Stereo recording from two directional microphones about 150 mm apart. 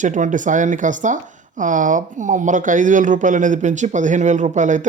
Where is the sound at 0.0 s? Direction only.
55° right (ahead or behind).